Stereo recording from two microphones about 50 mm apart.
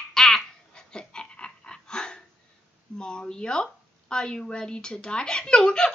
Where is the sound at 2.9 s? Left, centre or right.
Centre.